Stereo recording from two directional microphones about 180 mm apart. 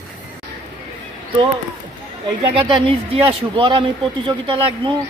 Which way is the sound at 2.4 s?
30° right (ahead or behind).